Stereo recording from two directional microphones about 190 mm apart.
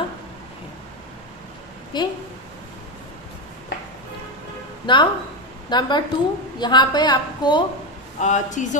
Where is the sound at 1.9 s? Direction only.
25° left (ahead or behind).